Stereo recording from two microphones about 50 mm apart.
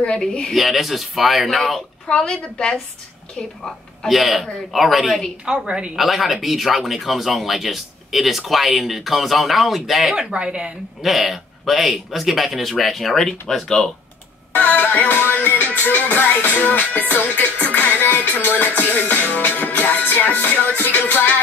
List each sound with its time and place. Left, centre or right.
0.0 s speech: centre
0.5 s speech: centre
2.0 s a woman's voice: centre
4.1 s speech: centre
5.4 s a woman's voice: centre
5.9 s speech: centre
10.3 s a woman's voice: centre
11.0 s speech: centre
14.5 s music: left